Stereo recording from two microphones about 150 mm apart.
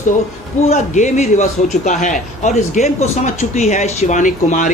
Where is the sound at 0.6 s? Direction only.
50° left (ahead or behind).